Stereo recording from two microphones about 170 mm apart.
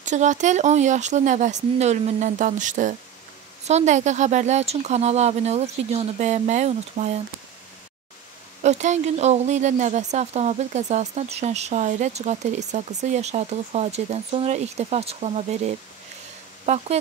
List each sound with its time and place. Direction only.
0.0 s speech: 45° right (ahead or behind)
8.6 s speech: 40° right (ahead or behind)